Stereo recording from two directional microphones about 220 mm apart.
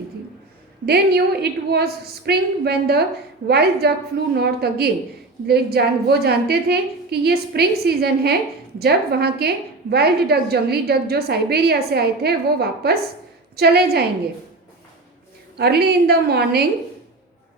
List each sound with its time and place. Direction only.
0.9 s a woman's voice: 45° right (ahead or behind)
15.5 s a woman's voice: 45° right (ahead or behind)